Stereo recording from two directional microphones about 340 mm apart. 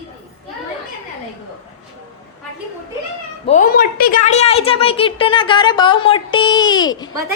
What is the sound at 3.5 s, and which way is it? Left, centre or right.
A woman's voice, left.